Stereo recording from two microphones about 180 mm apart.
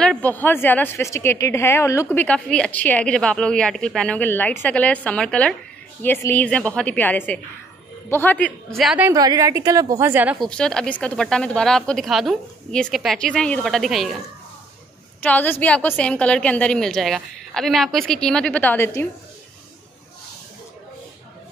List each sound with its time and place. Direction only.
0.0 s a woman's voice: 5° left (ahead or behind)
9.1 s a woman's voice: 20° right (ahead or behind)
10.4 s speech: 5° left (ahead or behind)
15.2 s a woman's voice: 10° left (ahead or behind)